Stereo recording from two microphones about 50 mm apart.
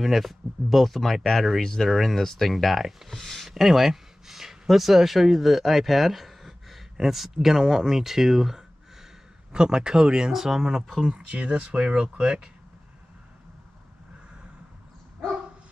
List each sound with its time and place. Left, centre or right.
0.0 s speech: centre
11.0 s speech: centre